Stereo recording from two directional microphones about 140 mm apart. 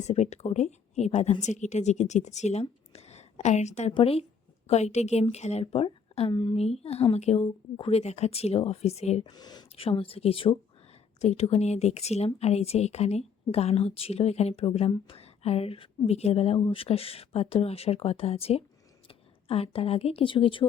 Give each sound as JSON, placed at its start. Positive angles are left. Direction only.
{"t": 0.0, "sound": "speech", "side_deg": 50}
{"t": 3.9, "sound": "speech", "side_deg": 45}
{"t": 6.3, "sound": "speech", "side_deg": 30}
{"t": 6.6, "sound": "speech", "side_deg": 50}
{"t": 9.3, "sound": "speech", "side_deg": 30}
{"t": 9.7, "sound": "a woman's voice", "side_deg": 40}